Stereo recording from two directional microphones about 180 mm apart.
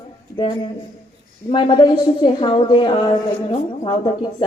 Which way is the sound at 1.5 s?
25° left (ahead or behind).